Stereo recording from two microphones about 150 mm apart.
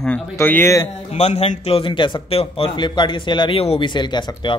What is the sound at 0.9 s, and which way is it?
A man's voice, 45° left (ahead or behind).